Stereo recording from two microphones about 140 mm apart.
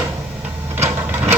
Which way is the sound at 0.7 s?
15° right (ahead or behind).